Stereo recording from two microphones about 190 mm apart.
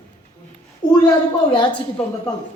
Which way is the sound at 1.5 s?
25° left (ahead or behind).